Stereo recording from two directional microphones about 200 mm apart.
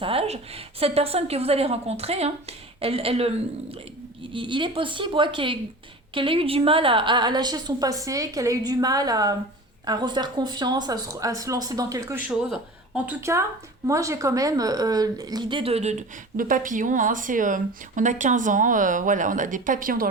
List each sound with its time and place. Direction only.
0.0 s a woman's voice: 30° right (ahead or behind)
12.3 s a woman's voice: 5° right (ahead or behind); by 20.1 s 45° right (ahead or behind)